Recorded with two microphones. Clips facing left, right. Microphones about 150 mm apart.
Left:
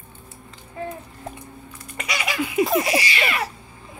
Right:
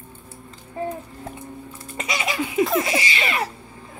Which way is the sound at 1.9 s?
25° right (ahead or behind).